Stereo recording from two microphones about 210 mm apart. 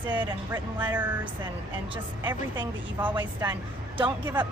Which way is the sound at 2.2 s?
20° right (ahead or behind).